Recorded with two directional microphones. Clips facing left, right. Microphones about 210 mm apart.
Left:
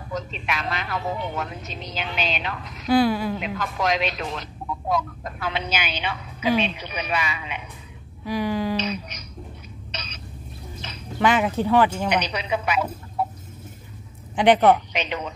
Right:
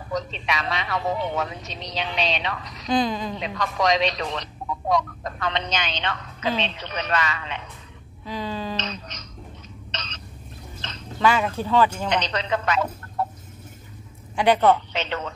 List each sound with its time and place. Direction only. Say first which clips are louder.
0.1 s a woman's voice: right 2 dB; centre (ahead or behind)
9.8 s throat clearing: right 1 dB; 10° left (ahead or behind)
10.8 s speech: even; 10° left (ahead or behind)
14.3 s a man's voice: left 2 dB; 15° left (ahead or behind)